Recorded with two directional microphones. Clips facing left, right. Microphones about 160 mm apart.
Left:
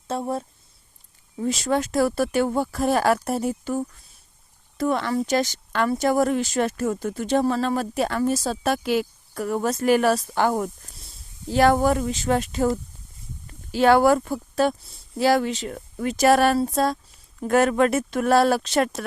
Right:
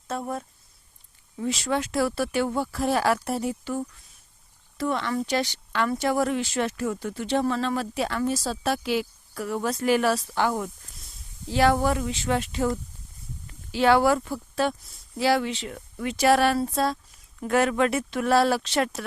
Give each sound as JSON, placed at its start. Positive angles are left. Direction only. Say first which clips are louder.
{"t": 0.1, "sound": "speech", "louder": "left 4 dB", "side_deg": 30}
{"t": 1.4, "sound": "speech", "louder": "left 3 dB", "side_deg": 40}